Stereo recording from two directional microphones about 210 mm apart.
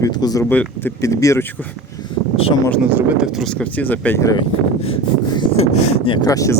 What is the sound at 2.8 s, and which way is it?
Speech, 10° right (ahead or behind).